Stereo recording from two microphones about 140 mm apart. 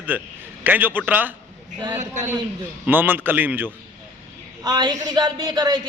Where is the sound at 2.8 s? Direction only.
15° right (ahead or behind).